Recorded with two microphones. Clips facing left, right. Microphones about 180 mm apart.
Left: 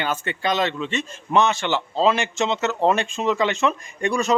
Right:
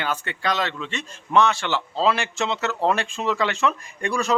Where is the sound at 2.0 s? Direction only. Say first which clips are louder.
Left 3 dB; 20° left (ahead or behind).